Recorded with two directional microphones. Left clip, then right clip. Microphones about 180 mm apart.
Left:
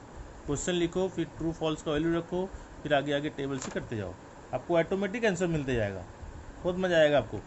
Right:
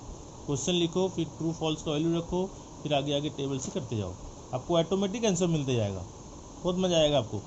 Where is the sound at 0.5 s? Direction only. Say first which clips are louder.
Right 1 dB; 35° left (ahead or behind).